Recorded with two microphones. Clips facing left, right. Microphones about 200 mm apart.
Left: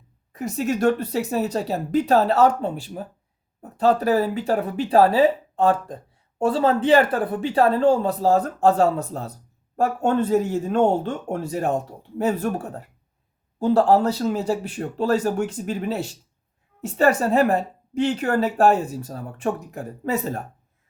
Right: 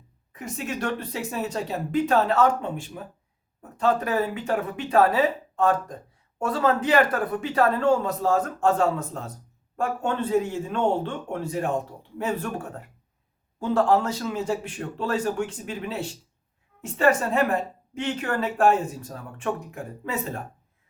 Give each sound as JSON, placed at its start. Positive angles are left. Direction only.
{"t": 0.3, "sound": "a woman's voice", "side_deg": 40}
{"t": 13.6, "sound": "a woman's voice", "side_deg": 35}